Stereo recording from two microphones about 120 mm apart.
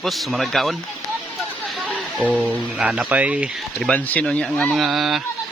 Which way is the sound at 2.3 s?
10° right (ahead or behind).